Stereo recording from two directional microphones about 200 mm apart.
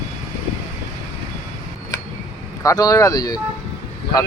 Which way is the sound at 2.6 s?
15° left (ahead or behind).